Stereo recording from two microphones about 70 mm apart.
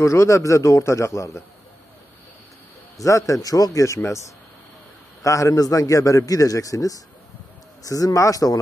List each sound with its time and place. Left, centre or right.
0.0 s a man's voice: left
3.0 s a man's voice: left
5.2 s a man's voice: left